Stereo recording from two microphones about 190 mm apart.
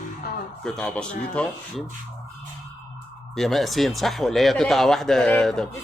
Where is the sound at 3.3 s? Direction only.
Centre (ahead or behind).